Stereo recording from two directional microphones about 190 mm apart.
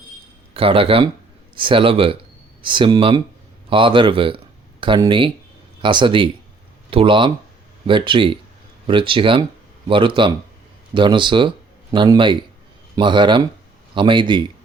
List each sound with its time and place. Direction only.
0.5 s speech: 30° right (ahead or behind)